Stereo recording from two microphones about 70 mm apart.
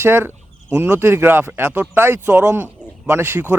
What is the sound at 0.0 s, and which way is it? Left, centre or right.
A man's voice, right.